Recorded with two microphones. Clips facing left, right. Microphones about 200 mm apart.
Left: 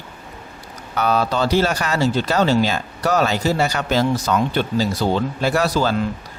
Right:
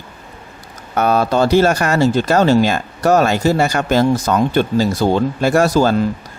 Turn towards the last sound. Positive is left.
turn(degrees=-45)  # may be behind; listen again after turning